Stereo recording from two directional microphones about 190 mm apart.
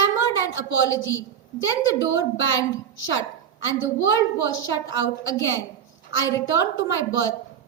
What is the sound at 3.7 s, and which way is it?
A woman's voice, 75° left (ahead or behind).